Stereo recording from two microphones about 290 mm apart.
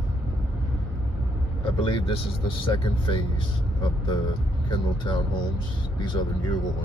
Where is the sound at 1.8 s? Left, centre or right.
Centre.